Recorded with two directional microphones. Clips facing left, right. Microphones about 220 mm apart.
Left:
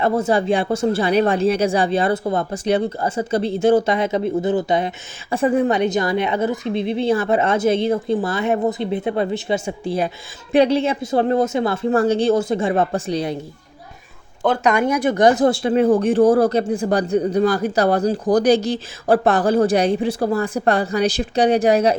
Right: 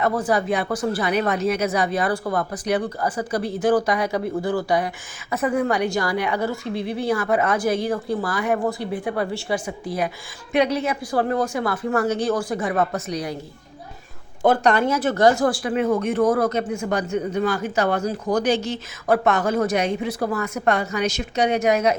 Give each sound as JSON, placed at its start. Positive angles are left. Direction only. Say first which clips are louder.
{"t": 0.0, "sound": "a woman's voice", "louder": "left 3 dB", "side_deg": 25}
{"t": 14.6, "sound": "speech", "louder": "left 2 dB", "side_deg": 10}